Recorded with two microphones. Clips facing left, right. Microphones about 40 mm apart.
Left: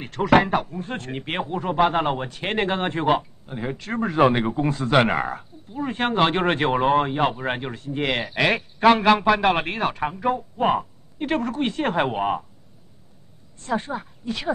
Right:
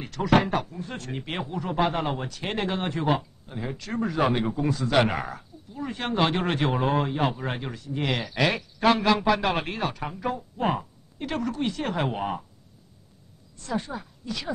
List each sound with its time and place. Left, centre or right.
0.0 s speech: left
13.6 s speech: left